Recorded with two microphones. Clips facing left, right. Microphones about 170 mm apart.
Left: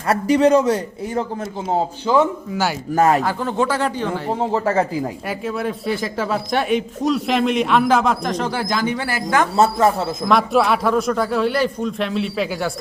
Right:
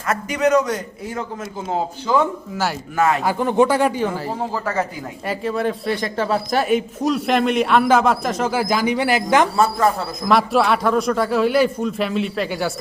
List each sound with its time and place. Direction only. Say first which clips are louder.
0.1 s a man's voice: left 4 dB; 30° left (ahead or behind)
2.1 s speech: left 2 dB; 15° left (ahead or behind)
2.5 s speech: left 2 dB; centre (ahead or behind)
2.9 s a man's voice: left 3 dB; 40° left (ahead or behind)
3.2 s speech: right 4 dB; 15° right (ahead or behind)
4.4 s speech: left 7 dB; 25° left (ahead or behind)
5.3 s speech: right 5 dB; centre (ahead or behind); by 9.5 s 20° right (ahead or behind)
9.6 s speech: left 2 dB; 25° left (ahead or behind)
10.2 s speech: even; centre (ahead or behind)